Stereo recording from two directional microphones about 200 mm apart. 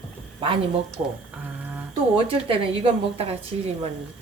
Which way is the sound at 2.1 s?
25° right (ahead or behind).